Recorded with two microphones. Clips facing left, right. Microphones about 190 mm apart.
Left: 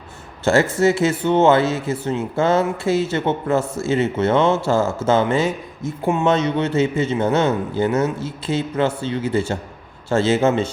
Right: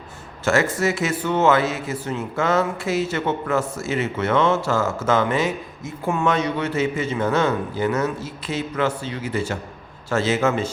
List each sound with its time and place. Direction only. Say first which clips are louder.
0.4 s speech: left 4 dB; 30° left (ahead or behind)